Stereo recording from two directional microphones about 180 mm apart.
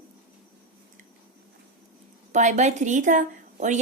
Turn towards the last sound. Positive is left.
turn(degrees=-45)  # may be behind; listen again after turning